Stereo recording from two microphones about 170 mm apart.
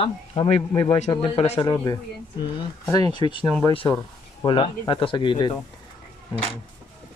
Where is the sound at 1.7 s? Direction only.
20° left (ahead or behind).